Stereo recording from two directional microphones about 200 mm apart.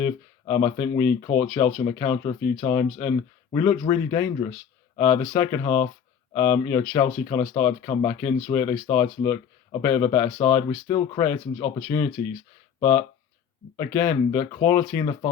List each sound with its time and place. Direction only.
0.0 s speech: 15° left (ahead or behind)